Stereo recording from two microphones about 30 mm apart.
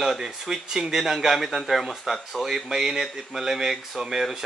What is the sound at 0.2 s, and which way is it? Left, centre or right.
A man's voice, centre.